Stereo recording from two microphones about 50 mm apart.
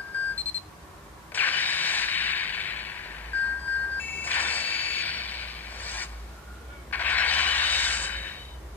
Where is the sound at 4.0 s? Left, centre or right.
Left.